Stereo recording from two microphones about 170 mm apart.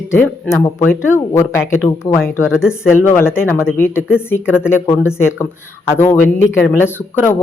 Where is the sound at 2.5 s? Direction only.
5° right (ahead or behind).